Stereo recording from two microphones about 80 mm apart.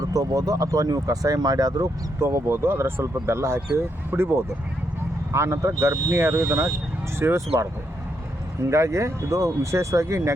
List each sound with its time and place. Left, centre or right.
0.0 s speech: right
2.1 s speech: right
8.7 s speech: right